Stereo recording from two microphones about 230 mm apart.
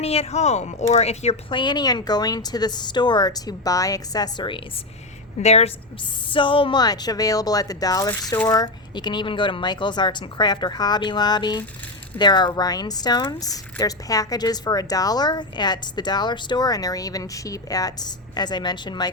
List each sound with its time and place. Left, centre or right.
0.0 s a woman's voice: left